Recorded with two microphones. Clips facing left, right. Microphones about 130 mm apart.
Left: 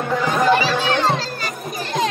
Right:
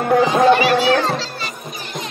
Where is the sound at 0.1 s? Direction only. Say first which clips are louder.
Right 5 dB; 55° right (ahead or behind).